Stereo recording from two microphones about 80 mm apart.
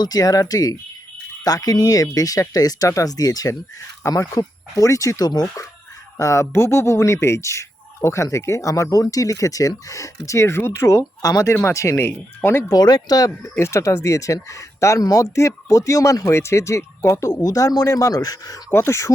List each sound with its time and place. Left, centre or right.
0.0 s speech: left
6.1 s speech: left
11.5 s speech: left
12.7 s speech: left
13.4 s speech: left
17.4 s speech: left
18.7 s speech: left